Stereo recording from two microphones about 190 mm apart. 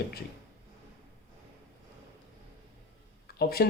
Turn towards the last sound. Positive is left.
turn(degrees=55)  # may be behind; listen again after turning